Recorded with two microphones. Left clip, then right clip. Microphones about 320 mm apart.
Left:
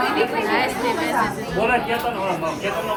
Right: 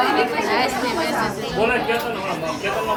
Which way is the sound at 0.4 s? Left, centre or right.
Centre.